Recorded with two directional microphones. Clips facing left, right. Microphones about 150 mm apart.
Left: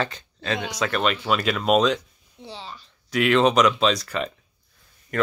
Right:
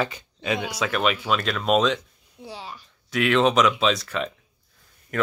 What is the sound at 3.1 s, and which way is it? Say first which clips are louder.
Speech: left 1 dB; centre (ahead or behind).